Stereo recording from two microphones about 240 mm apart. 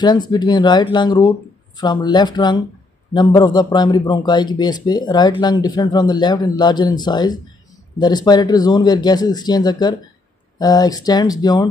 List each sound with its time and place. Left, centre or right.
0.0 s a man's voice: centre